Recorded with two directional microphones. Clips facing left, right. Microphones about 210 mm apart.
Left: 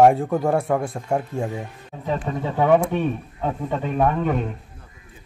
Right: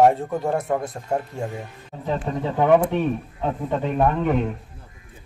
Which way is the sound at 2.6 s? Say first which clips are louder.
Even; 10° right (ahead or behind).